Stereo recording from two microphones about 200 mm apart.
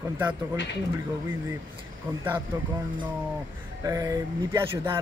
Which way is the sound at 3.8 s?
15° right (ahead or behind).